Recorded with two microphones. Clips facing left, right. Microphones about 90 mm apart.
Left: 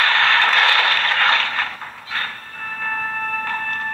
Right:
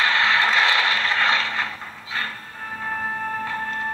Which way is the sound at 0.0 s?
55° left (ahead or behind).